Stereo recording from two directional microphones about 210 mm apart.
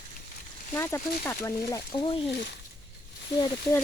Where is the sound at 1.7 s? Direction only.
25° left (ahead or behind).